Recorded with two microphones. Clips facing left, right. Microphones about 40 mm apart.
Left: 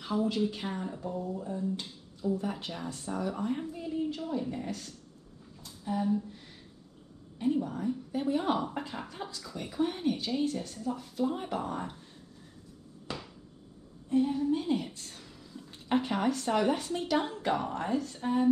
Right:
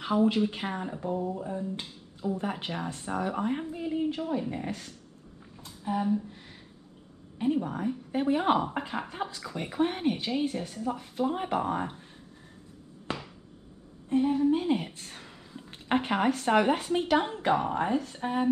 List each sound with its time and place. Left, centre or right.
0.0 s speech: right
5.6 s a sound: right
7.3 s speech: right
10.8 s speech: right
13.1 s a sound: right
14.0 s speech: right